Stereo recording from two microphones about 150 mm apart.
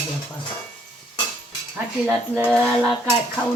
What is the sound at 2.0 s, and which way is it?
Speech, 15° right (ahead or behind).